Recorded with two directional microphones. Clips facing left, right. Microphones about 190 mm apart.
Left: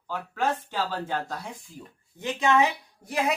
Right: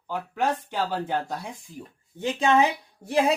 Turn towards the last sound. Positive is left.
turn(degrees=-30)  # may be behind; listen again after turning